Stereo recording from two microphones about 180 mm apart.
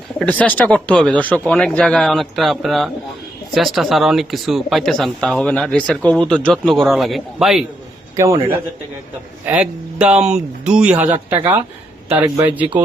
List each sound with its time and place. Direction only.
0.2 s speech: 10° left (ahead or behind)
8.1 s speech: 15° right (ahead or behind)
12.2 s speech: 10° right (ahead or behind)